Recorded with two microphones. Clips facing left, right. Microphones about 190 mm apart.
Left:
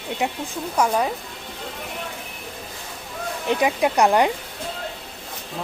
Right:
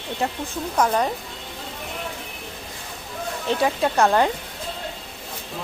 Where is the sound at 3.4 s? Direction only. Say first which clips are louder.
Left 1 dB; 15° left (ahead or behind).